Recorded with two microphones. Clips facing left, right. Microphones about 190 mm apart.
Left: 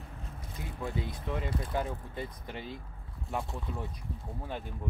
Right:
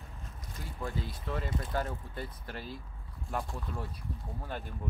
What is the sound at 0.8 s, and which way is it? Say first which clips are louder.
Speech: left 2 dB; 20° left (ahead or behind).